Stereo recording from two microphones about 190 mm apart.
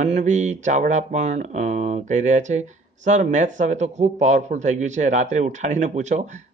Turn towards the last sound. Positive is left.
turn(degrees=-40)  # may be behind; listen again after turning